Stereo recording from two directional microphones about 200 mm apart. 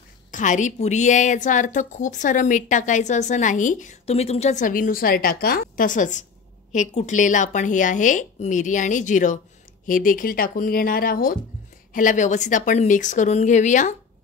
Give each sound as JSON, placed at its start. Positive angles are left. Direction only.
{"t": 0.3, "sound": "a woman's voice", "side_deg": 40}